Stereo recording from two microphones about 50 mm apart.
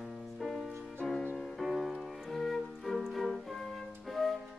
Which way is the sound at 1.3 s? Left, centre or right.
Centre.